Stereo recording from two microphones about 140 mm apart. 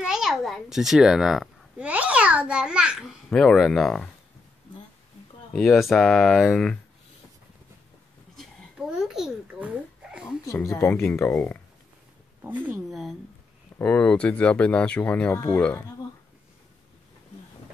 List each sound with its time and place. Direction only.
0.0 s a child's voice: 5° right (ahead or behind)
3.3 s speech: 5° left (ahead or behind)
5.5 s speech: centre (ahead or behind)
8.4 s babbling: centre (ahead or behind)
10.7 s speech: 15° left (ahead or behind)
12.4 s speech: 10° right (ahead or behind)
13.7 s speech: 10° left (ahead or behind)